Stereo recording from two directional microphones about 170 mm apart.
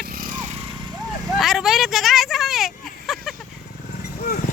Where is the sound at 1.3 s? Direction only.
Centre (ahead or behind).